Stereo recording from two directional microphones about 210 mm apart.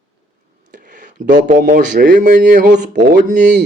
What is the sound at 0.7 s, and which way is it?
Speech, 40° right (ahead or behind).